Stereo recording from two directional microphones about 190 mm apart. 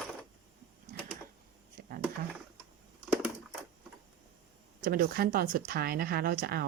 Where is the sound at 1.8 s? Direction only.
55° right (ahead or behind).